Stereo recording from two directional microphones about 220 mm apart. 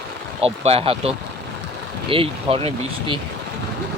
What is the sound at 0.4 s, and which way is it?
Speech, 25° right (ahead or behind).